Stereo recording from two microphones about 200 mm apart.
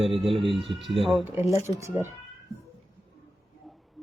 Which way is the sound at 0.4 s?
Centre (ahead or behind).